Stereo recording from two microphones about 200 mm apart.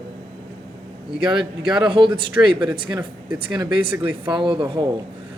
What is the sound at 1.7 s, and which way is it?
A man's voice, 25° right (ahead or behind).